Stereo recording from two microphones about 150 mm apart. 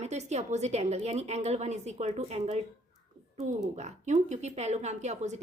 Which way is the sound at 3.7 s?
50° right (ahead or behind).